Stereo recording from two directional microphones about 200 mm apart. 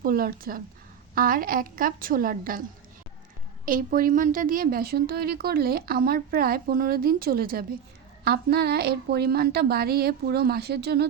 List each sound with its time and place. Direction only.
0.0 s a woman's voice: 45° right (ahead or behind)
3.7 s a woman's voice: 45° right (ahead or behind)